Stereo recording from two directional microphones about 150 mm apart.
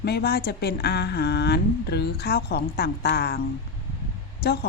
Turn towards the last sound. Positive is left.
turn(degrees=90)